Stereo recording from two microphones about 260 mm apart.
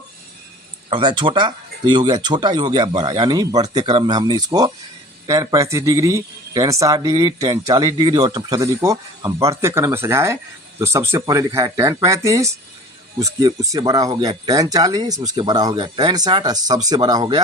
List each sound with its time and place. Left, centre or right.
0.9 s a man's voice: centre